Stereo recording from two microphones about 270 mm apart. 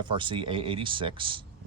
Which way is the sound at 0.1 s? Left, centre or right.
Centre.